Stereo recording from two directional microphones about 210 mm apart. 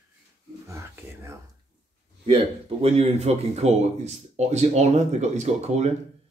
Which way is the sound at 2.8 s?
30° right (ahead or behind).